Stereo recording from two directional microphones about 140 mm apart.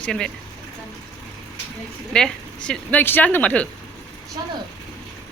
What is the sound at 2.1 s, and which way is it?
Speech, 5° left (ahead or behind).